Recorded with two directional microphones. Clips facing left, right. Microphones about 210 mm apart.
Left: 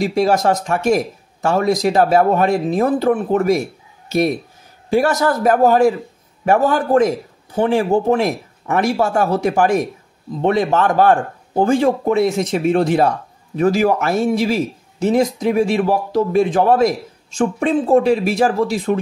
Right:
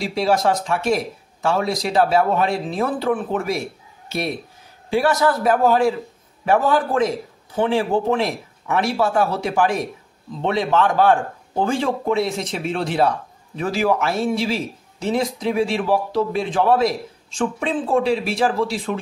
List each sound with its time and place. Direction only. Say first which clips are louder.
0.0 s speech: left 4 dB; 45° left (ahead or behind)
4.8 s speech: left 2 dB; 45° left (ahead or behind)